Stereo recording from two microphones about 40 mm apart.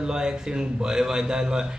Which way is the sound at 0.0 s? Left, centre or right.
Centre.